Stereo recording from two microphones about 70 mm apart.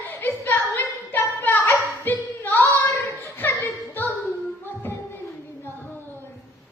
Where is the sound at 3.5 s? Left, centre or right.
Left.